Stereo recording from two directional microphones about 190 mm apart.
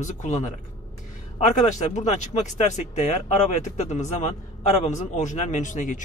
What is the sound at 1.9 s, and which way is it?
Speech, 40° left (ahead or behind).